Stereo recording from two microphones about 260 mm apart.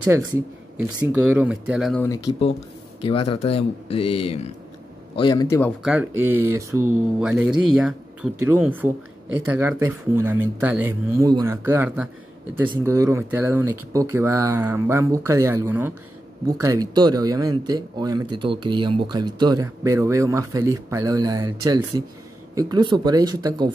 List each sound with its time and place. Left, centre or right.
0.8 s speech: centre
3.1 s a man's voice: left
5.8 s speech: centre